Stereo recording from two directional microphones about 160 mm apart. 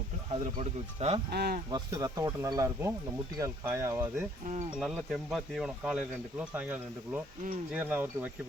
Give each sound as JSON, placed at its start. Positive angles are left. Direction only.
{"t": 0.6, "sound": "speech", "side_deg": -40}
{"t": 1.3, "sound": "speech", "side_deg": -85}
{"t": 1.7, "sound": "speech", "side_deg": -20}
{"t": 4.4, "sound": "speech", "side_deg": -50}
{"t": 4.8, "sound": "speech", "side_deg": -5}